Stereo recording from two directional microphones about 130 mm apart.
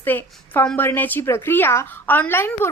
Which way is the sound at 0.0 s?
15° left (ahead or behind).